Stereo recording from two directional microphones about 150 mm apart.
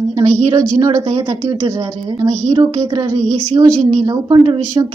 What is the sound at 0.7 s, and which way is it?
Speech, 25° right (ahead or behind).